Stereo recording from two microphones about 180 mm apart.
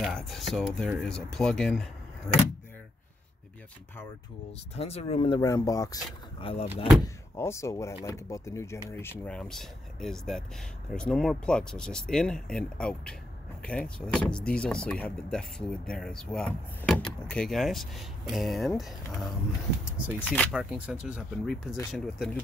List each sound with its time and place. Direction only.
0.0 s speech: centre (ahead or behind)
4.5 s speech: 35° left (ahead or behind)
5.4 s speech: 20° left (ahead or behind)
6.4 s speech: 30° left (ahead or behind)
7.3 s speech: 15° left (ahead or behind)
9.2 s speech: 5° left (ahead or behind)
20.5 s speech: 5° right (ahead or behind)